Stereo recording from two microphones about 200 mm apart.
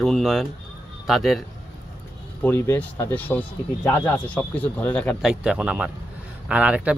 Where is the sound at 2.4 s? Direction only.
10° left (ahead or behind).